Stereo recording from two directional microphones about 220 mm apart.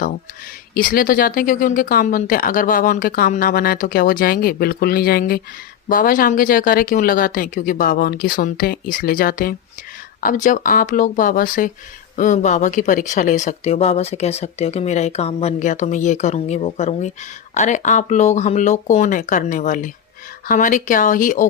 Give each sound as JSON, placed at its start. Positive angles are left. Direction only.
{"t": 0.7, "sound": "speech", "side_deg": 40}